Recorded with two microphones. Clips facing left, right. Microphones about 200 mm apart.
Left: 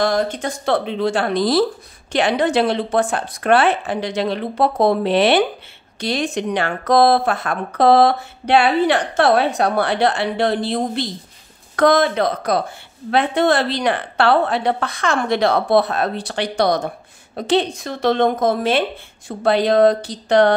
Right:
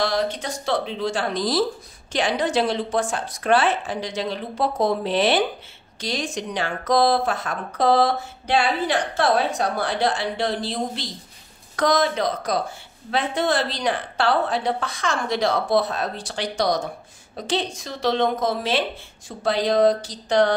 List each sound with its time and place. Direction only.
0.0 s speech: 50° left (ahead or behind)